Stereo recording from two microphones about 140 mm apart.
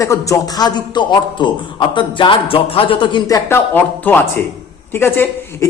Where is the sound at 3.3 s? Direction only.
15° left (ahead or behind).